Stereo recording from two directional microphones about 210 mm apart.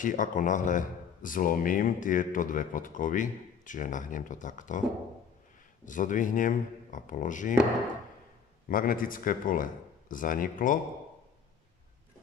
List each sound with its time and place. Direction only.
0.0 s a man's voice: 40° left (ahead or behind)
5.9 s a man's voice: 40° left (ahead or behind)
8.6 s a man's voice: 40° left (ahead or behind)